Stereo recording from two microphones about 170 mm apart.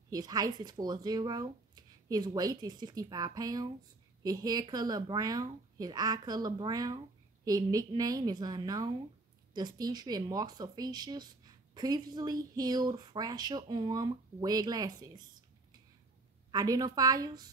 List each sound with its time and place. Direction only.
0.1 s speech: 25° right (ahead or behind)
16.5 s speech: 20° right (ahead or behind)